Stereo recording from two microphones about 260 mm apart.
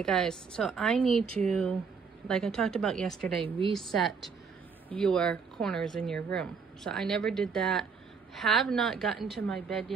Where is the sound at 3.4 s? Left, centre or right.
Centre.